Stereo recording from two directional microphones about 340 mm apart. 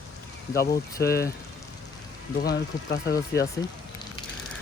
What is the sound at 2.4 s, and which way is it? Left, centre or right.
Speech, left.